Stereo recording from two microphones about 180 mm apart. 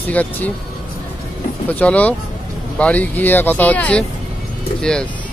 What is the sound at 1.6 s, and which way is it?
A man's voice, 10° left (ahead or behind).